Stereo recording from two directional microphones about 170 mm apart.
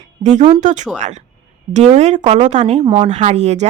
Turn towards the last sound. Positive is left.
turn(degrees=-40)  # may be behind; listen again after turning